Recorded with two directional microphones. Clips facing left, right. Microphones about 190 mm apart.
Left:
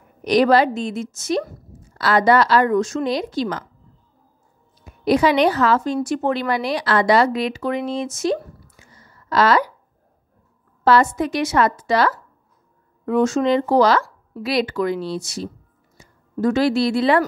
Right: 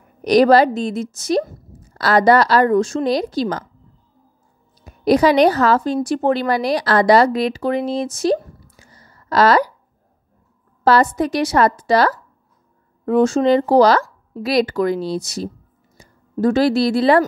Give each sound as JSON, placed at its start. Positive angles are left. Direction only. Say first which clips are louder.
{"t": 0.2, "sound": "speech", "louder": "right 3 dB", "side_deg": -40}
{"t": 4.8, "sound": "a woman's voice", "louder": "right 3 dB", "side_deg": -40}
{"t": 10.8, "sound": "speech", "louder": "right 1 dB", "side_deg": -35}